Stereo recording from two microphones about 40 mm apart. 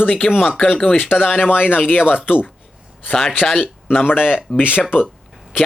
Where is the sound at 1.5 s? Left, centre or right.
Left.